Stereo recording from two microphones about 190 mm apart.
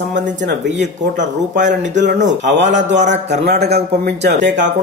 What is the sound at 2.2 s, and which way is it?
A man's voice, 70° right (ahead or behind).